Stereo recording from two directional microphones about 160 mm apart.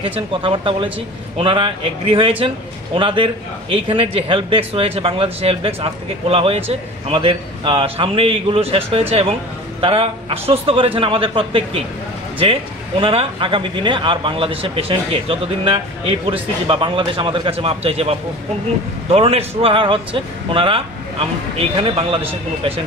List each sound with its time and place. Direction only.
0.0 s a man's voice: 35° right (ahead or behind)
13.0 s a man's voice: 35° right (ahead or behind)